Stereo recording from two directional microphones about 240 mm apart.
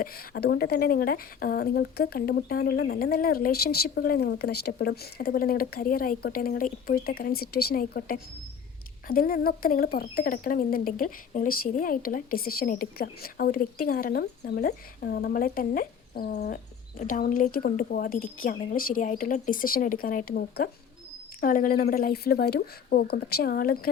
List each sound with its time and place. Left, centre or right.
0.0 s speech: left